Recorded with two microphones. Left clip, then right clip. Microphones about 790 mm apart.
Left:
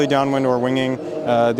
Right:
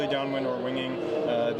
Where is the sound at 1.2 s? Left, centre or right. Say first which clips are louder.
Left 12 dB; left.